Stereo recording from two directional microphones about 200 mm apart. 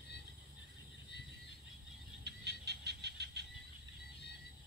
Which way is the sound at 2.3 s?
55° right (ahead or behind).